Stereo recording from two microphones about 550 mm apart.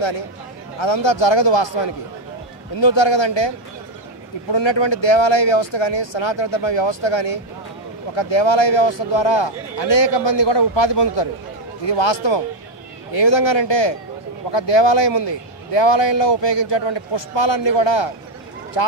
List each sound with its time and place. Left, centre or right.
0.7 s a man's voice: left